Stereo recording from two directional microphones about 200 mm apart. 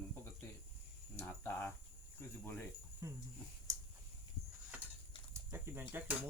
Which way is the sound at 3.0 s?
15° right (ahead or behind).